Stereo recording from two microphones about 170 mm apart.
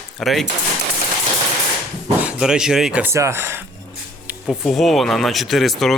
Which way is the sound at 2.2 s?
5° right (ahead or behind).